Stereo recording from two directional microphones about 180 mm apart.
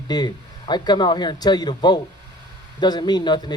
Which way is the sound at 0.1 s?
20° left (ahead or behind).